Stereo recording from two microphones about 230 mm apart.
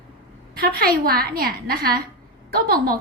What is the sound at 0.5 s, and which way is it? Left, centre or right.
A woman's voice, right.